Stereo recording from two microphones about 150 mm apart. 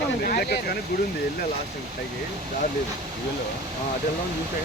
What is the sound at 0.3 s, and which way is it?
Speech, 90° left.